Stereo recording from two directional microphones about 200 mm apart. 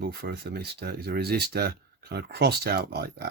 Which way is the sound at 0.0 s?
50° right (ahead or behind).